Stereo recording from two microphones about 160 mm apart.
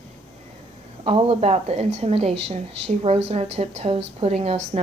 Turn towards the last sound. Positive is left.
turn(degrees=-40)  # may be behind; listen again after turning